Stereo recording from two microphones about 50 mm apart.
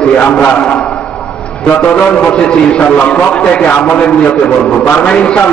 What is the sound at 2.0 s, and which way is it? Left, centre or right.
A man's voice, left.